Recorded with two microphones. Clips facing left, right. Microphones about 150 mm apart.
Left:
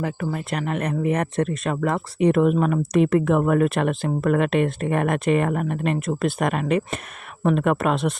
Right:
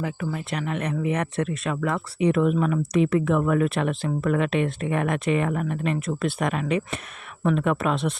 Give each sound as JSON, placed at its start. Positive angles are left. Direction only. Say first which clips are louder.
{"t": 0.0, "sound": "speech", "louder": "left 3 dB", "side_deg": 45}